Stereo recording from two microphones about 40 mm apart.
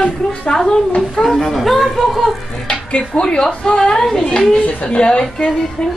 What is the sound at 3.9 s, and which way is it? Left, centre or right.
Speech, centre.